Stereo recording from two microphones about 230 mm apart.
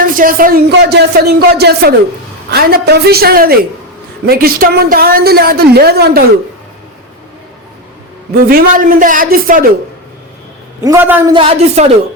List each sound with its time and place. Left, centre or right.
0.0 s a woman's voice: right
8.4 s a woman's voice: right
10.8 s a man's voice: centre
11.3 s speech: right